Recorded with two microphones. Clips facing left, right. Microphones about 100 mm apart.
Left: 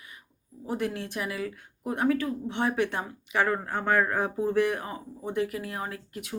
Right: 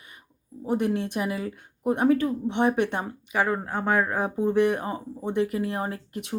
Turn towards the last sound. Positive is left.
turn(degrees=-25)  # may be behind; listen again after turning